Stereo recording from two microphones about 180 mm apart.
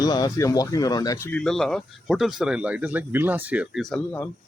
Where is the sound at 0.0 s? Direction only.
20° left (ahead or behind).